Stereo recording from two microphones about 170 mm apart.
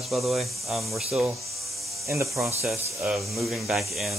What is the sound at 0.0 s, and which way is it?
Speech, centre (ahead or behind).